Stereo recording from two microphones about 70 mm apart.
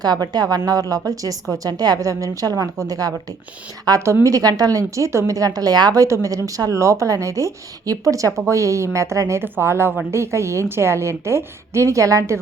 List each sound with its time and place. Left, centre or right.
0.0 s a woman's voice: right
2.0 s a woman's voice: right
4.0 s a woman's voice: right
4.9 s speech: right
5.4 s a woman's voice: right